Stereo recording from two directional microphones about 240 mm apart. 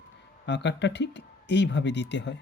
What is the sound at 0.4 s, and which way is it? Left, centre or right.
Speech, left.